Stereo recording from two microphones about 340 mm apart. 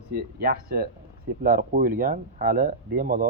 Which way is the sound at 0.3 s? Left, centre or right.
Right.